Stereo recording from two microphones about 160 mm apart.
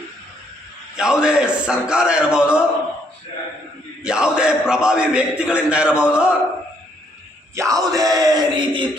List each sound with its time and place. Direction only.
0.9 s a man's voice: 5° right (ahead or behind)
4.0 s a man's voice: 5° right (ahead or behind)
7.5 s speech: 20° right (ahead or behind)
7.9 s a sound: 20° right (ahead or behind)